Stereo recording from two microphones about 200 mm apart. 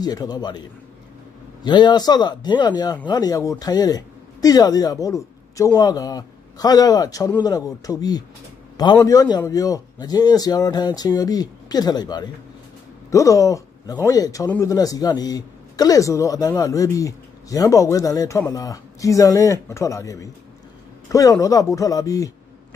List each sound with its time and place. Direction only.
0.0 s a man's voice: 20° left (ahead or behind)